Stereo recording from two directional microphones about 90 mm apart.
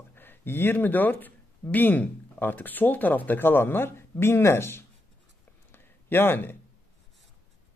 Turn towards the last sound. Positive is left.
turn(degrees=25)  # may be behind; listen again after turning